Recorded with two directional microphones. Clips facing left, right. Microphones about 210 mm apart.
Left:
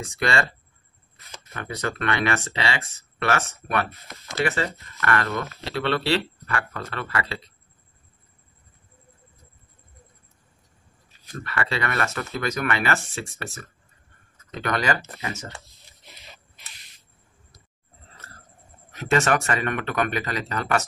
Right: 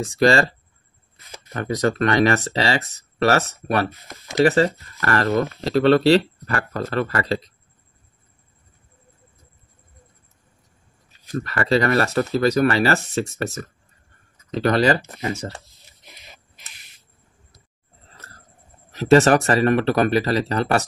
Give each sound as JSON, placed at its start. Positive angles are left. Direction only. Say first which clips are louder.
{"t": 0.0, "sound": "speech", "louder": "right 8 dB", "side_deg": -35}
{"t": 1.5, "sound": "speech", "louder": "right 9 dB", "side_deg": -40}
{"t": 11.4, "sound": "speech", "louder": "right 8 dB", "side_deg": -40}
{"t": 18.9, "sound": "speech", "louder": "right 8 dB", "side_deg": -35}